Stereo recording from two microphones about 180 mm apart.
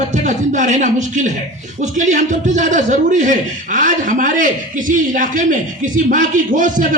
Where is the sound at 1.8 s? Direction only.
45° right (ahead or behind).